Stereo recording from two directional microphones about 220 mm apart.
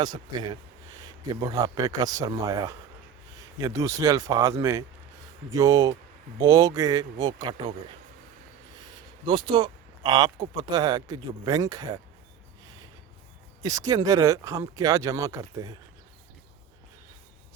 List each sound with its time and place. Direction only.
0.0 s a man's voice: 20° right (ahead or behind)
9.2 s speech: 20° right (ahead or behind)
13.6 s speech: 15° right (ahead or behind)